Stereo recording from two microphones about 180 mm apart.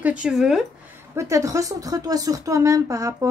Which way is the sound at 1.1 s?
20° right (ahead or behind).